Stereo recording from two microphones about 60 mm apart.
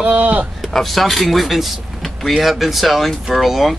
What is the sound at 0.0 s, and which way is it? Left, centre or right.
Speech, right.